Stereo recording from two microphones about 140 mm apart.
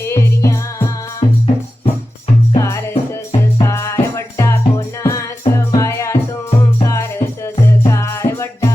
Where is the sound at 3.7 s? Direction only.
20° left (ahead or behind).